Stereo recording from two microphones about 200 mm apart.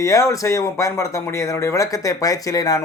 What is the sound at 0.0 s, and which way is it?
Speech, 15° left (ahead or behind).